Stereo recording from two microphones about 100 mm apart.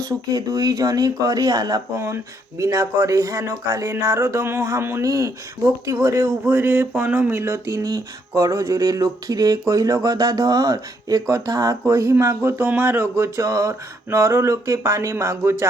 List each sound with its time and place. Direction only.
0.0 s speech: 40° right (ahead or behind)
2.0 s speech: 30° right (ahead or behind)